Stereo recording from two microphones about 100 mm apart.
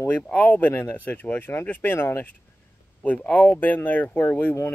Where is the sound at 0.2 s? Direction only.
15° left (ahead or behind).